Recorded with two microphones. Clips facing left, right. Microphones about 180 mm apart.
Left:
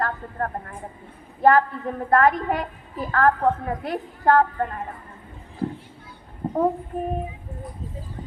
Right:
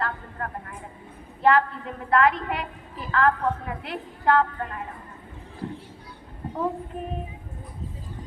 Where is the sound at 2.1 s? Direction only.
45° left (ahead or behind).